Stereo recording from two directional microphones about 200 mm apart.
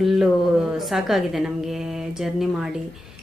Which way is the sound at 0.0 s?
Centre (ahead or behind).